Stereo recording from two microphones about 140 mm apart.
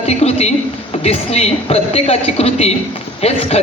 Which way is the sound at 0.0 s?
50° left (ahead or behind).